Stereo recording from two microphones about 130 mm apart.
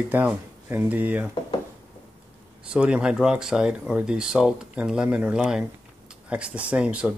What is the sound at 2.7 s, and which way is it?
Speech, 5° right (ahead or behind).